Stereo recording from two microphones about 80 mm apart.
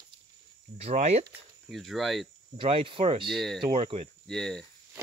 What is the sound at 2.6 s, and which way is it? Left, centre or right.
Speech, right.